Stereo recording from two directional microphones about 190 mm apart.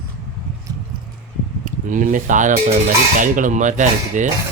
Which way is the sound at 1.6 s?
45° right (ahead or behind).